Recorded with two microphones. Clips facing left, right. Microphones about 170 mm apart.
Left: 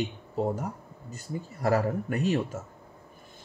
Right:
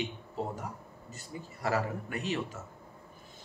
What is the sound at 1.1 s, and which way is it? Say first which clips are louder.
Speech: left 8 dB; 45° left (ahead or behind).